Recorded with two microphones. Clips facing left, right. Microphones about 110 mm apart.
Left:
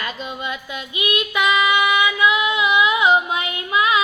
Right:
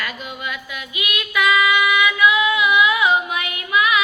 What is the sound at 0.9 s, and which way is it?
Female singing, 25° left (ahead or behind).